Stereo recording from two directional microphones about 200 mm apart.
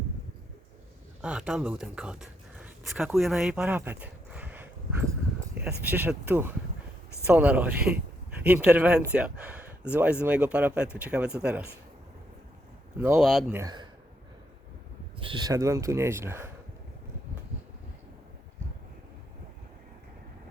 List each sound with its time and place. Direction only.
1.2 s speech: 5° right (ahead or behind)
5.8 s speech: 10° right (ahead or behind)
13.1 s speech: centre (ahead or behind)
13.5 s speech: 15° right (ahead or behind)
15.2 s speech: 25° right (ahead or behind)